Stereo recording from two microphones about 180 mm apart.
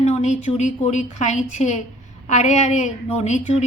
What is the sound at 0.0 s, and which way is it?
A woman's voice, 40° left (ahead or behind).